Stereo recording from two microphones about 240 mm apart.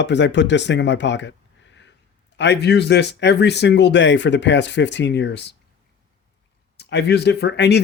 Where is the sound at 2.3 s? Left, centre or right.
Left.